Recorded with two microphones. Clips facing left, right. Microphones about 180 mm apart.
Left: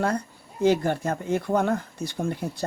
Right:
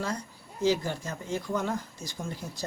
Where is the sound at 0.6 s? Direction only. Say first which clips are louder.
Left 6 dB; 60° left (ahead or behind).